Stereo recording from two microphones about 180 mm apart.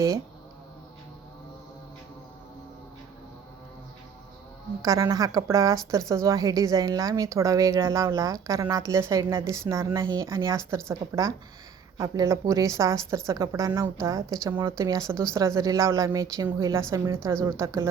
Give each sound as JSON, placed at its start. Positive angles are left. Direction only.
{"t": 4.8, "sound": "a woman's voice", "side_deg": -20}